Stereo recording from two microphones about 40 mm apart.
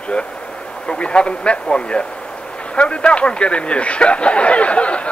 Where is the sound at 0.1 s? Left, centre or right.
Left.